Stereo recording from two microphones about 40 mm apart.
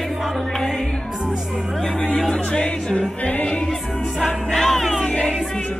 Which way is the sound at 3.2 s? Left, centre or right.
Left.